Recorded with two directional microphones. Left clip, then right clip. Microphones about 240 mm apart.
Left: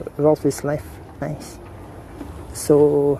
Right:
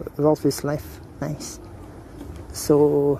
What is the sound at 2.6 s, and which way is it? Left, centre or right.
Speech, centre.